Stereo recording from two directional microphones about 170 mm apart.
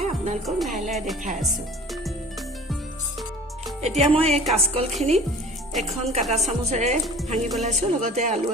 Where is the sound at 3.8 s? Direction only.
40° right (ahead or behind).